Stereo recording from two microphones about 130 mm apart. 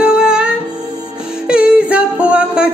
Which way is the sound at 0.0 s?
5° right (ahead or behind).